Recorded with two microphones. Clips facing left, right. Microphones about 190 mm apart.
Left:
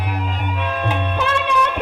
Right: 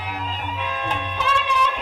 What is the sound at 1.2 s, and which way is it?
Music, 60° left (ahead or behind).